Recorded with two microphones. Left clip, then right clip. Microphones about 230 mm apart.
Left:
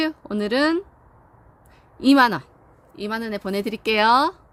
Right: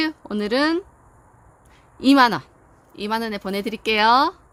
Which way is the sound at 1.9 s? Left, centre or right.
Centre.